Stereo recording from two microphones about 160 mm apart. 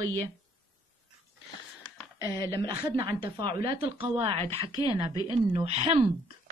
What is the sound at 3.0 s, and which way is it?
Speech, 30° right (ahead or behind).